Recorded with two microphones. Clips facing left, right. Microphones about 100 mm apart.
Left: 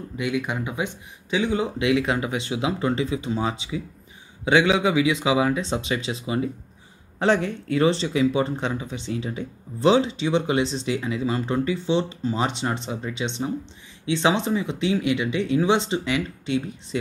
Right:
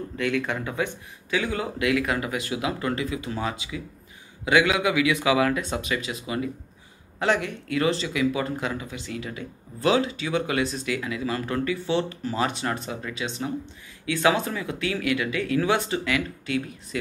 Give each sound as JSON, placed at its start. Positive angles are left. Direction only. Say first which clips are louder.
{"t": 0.2, "sound": "speech", "louder": "even", "side_deg": 15}